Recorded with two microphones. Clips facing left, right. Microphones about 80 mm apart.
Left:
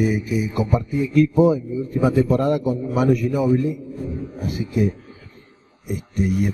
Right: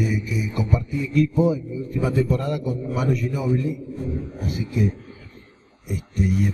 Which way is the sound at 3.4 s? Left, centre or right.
Left.